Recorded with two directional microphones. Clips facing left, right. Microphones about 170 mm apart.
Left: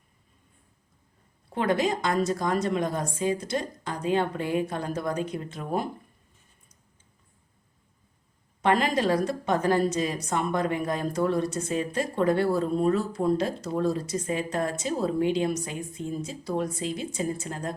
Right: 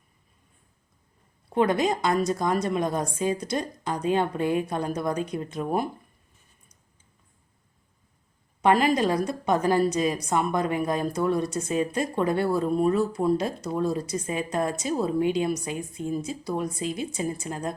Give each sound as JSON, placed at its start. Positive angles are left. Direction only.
{"t": 1.5, "sound": "a woman's voice", "side_deg": -15}
{"t": 8.6, "sound": "a woman's voice", "side_deg": -15}